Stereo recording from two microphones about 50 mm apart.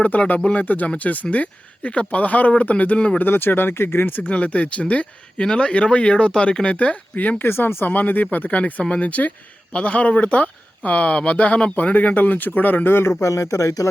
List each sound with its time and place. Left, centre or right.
0.0 s speech: left
0.6 s speech: left
3.2 s speech: left
4.2 s speech: left
7.4 s speech: left
13.2 s speech: left